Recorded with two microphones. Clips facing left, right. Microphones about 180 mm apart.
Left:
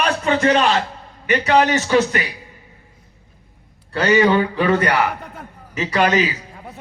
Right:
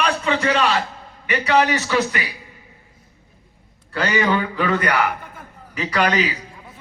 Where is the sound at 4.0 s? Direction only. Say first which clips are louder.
Left 5 dB; 20° left (ahead or behind).